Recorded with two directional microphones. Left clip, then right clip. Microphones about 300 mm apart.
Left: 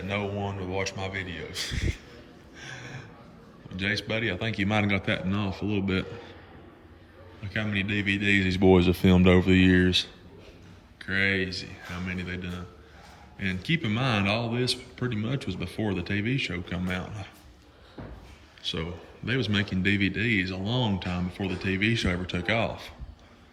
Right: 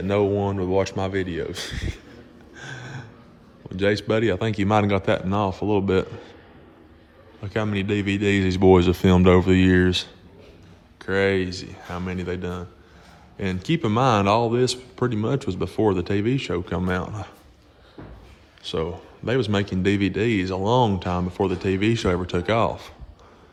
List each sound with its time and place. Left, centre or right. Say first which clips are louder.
0.3 s speech: right 9 dB; right
2.6 s gasp: right 4 dB; centre
3.7 s speech: right 7 dB; centre
7.4 s speech: right 4 dB; centre
9.6 s speech: right 3 dB; centre
11.1 s speech: right 5 dB; centre
18.6 s speech: right 6 dB; centre